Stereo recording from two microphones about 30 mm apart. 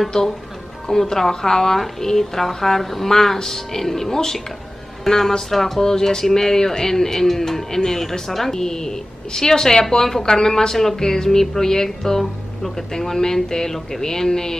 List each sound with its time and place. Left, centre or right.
0.8 s speech: centre